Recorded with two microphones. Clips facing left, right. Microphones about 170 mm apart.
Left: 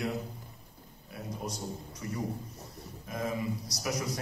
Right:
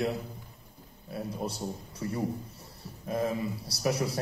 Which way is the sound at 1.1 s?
30° right (ahead or behind).